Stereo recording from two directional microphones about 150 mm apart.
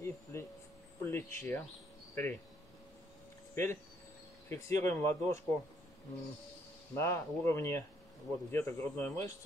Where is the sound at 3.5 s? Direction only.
15° left (ahead or behind).